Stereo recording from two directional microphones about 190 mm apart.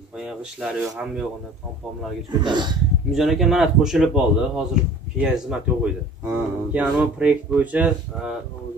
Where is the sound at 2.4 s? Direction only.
25° right (ahead or behind).